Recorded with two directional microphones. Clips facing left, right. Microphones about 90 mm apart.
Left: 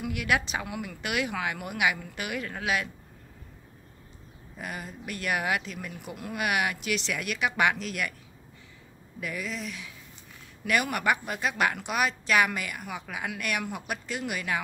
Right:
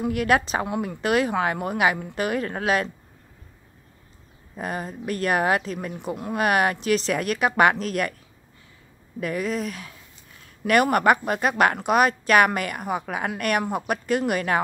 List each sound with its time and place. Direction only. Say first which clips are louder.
0.0 s speech: right 7 dB; 40° right (ahead or behind)
4.6 s speech: right 8 dB; 40° right (ahead or behind)
9.2 s a woman's voice: right 8 dB; 45° right (ahead or behind)